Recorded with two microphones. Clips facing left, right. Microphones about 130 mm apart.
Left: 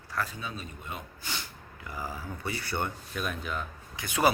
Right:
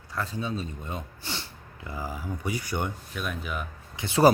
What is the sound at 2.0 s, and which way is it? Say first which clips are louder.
Speech: right 3 dB; 15° right (ahead or behind).